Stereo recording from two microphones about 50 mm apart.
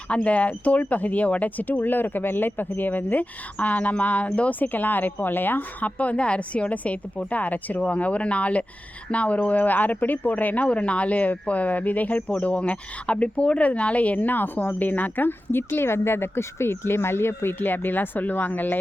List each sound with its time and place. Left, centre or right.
0.1 s speech: left
4.6 s speech: left
17.6 s speech: left